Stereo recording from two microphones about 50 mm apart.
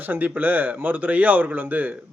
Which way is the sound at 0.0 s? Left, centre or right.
Right.